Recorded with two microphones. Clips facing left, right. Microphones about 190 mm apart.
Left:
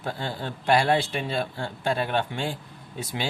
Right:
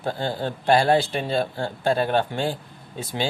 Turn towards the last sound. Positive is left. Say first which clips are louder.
# right 4 dB
turn(degrees=-30)  # may be behind; listen again after turning